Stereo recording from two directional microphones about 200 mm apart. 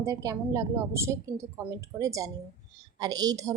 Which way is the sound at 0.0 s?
15° right (ahead or behind).